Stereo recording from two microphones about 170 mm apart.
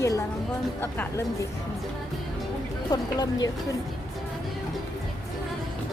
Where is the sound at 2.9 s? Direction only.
20° left (ahead or behind).